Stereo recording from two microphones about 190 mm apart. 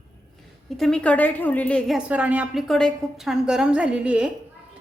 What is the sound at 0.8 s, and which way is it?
A woman's voice, 5° left (ahead or behind).